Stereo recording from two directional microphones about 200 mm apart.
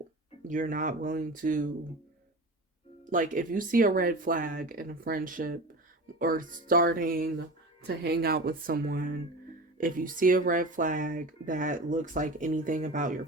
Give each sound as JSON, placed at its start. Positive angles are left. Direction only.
{"t": 0.4, "sound": "speech", "side_deg": -40}
{"t": 3.1, "sound": "speech", "side_deg": -40}